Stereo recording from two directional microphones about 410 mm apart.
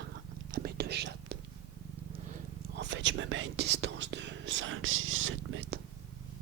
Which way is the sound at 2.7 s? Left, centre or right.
Right.